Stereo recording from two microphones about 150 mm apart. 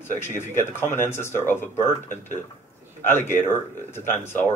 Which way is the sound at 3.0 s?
15° left (ahead or behind).